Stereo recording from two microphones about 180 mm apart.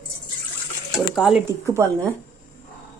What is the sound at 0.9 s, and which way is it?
Speech, 5° right (ahead or behind).